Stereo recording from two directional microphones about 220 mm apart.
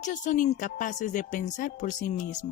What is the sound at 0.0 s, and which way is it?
A woman's voice, 35° left (ahead or behind).